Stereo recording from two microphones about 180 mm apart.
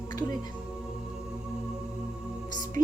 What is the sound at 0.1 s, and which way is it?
Music, 20° left (ahead or behind).